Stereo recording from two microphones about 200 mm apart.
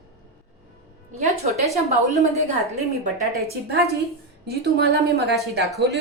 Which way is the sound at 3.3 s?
50° right (ahead or behind).